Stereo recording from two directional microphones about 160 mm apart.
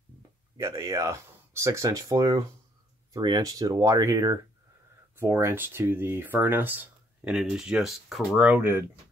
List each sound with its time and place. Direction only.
0.6 s speech: 20° right (ahead or behind)